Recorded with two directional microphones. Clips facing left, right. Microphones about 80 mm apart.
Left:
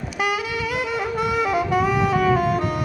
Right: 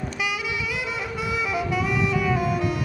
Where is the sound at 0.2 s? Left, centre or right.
Left.